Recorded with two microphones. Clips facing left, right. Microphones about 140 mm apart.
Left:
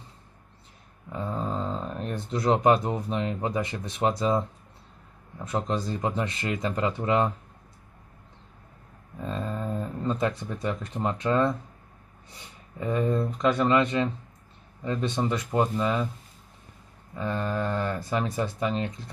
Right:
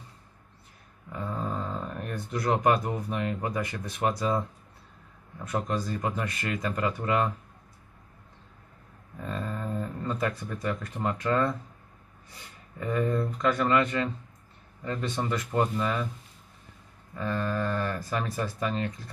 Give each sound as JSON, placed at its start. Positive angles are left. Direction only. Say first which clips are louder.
{"t": 1.1, "sound": "speech", "louder": "left 2 dB", "side_deg": 20}
{"t": 9.2, "sound": "speech", "louder": "left 2 dB", "side_deg": 20}
{"t": 12.7, "sound": "speech", "louder": "left 2 dB", "side_deg": 20}
{"t": 17.1, "sound": "speech", "louder": "left 1 dB", "side_deg": 20}